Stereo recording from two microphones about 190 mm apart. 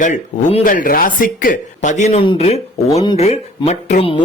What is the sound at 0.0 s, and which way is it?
A man's voice, 40° left (ahead or behind).